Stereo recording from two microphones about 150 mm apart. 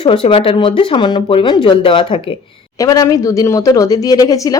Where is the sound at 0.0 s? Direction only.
35° left (ahead or behind).